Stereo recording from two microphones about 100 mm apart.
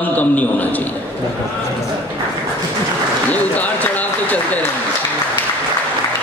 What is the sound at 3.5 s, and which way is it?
Run, 15° left (ahead or behind).